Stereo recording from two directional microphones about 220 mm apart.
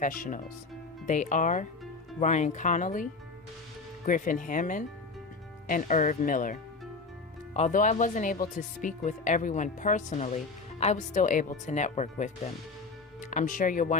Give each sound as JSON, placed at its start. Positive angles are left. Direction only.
{"t": 0.0, "sound": "speech", "side_deg": 35}
{"t": 13.3, "sound": "speech", "side_deg": 35}